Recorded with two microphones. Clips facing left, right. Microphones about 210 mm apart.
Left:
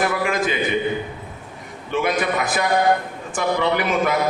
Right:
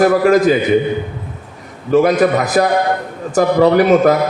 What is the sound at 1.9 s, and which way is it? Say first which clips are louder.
A man's voice: right 10 dB; 40° right (ahead or behind).